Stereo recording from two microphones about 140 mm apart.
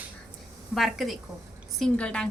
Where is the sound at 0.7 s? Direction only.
Centre (ahead or behind).